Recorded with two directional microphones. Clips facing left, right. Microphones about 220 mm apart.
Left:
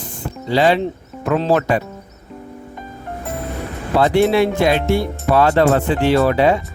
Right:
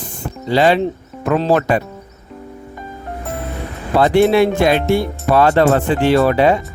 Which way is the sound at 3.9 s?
55° right (ahead or behind).